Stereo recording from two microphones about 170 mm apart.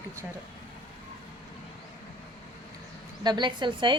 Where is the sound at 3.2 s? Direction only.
25° right (ahead or behind).